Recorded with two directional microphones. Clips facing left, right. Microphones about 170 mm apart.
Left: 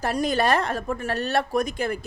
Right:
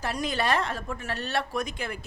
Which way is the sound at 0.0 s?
45° left (ahead or behind).